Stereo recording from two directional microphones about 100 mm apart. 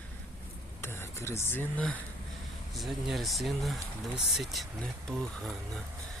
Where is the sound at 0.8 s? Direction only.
25° left (ahead or behind).